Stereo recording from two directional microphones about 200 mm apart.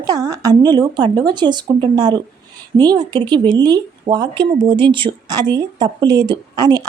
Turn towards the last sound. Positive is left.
turn(degrees=-20)  # may be behind; listen again after turning